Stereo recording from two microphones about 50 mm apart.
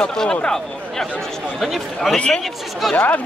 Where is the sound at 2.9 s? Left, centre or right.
Left.